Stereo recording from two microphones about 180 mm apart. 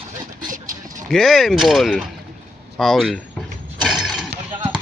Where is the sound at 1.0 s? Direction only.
Centre (ahead or behind).